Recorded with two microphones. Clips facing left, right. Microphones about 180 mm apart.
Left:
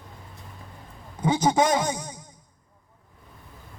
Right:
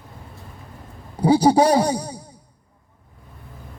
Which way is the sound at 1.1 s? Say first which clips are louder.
Right 7 dB; 35° right (ahead or behind).